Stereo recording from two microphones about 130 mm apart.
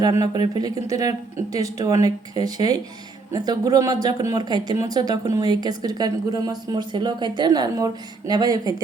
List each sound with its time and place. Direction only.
0.0 s speech: 30° right (ahead or behind)